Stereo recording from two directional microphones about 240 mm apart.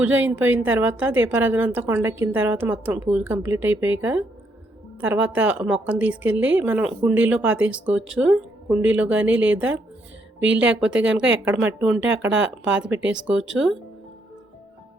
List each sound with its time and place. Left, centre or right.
0.0 s a woman's voice: centre